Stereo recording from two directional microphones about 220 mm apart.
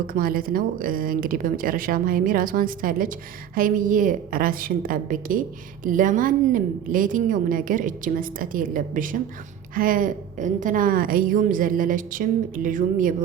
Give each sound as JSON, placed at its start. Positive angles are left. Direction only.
{"t": 0.1, "sound": "speech", "side_deg": -40}